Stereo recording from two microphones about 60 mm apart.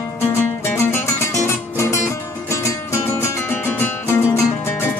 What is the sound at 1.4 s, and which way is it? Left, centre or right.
Music, left.